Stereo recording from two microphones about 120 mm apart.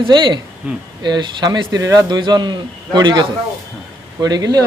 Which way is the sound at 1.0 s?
40° right (ahead or behind).